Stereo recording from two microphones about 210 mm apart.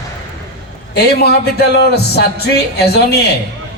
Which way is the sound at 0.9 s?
50° left (ahead or behind).